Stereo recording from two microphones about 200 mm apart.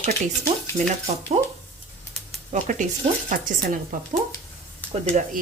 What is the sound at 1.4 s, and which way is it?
Speech, 35° right (ahead or behind).